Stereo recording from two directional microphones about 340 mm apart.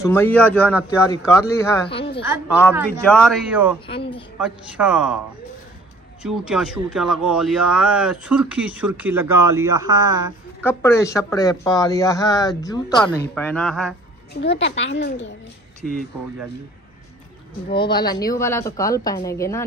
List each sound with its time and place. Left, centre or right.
0.0 s speech: centre
2.2 s speech: centre
3.8 s speech: centre
4.4 s speech: centre
6.2 s speech: centre
10.6 s speech: centre
14.6 s a woman's voice: left
15.8 s speech: centre
17.6 s speech: centre